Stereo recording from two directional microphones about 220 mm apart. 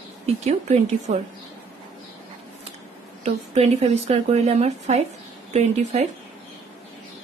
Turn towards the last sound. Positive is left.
turn(degrees=-30)  # may be behind; listen again after turning